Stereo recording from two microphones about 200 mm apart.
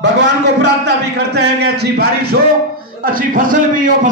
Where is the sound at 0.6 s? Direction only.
60° right (ahead or behind).